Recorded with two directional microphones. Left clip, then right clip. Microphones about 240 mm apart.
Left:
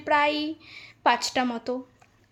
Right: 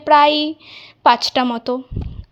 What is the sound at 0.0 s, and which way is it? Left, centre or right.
A woman's voice, right.